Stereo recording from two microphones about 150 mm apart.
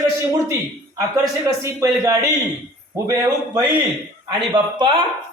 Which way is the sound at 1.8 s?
25° right (ahead or behind).